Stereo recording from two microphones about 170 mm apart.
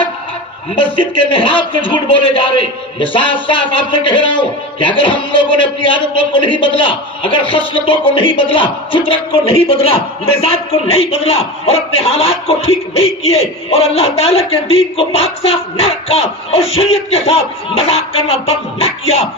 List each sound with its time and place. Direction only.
0.8 s a man's voice: 30° left (ahead or behind)
7.9 s music: 30° left (ahead or behind)